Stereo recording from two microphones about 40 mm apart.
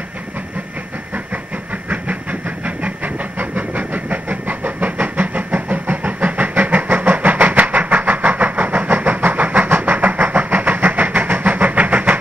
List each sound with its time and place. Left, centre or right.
1.9 s train: right
9.7 s train: right
9.9 s vehicle: right